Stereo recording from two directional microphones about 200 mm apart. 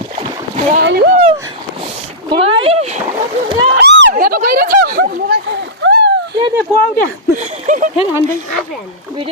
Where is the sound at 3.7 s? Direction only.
50° right (ahead or behind).